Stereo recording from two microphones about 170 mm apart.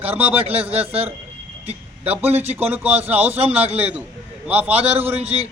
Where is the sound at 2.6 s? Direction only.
10° right (ahead or behind).